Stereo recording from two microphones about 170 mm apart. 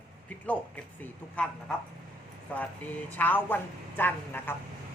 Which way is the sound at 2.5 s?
10° left (ahead or behind).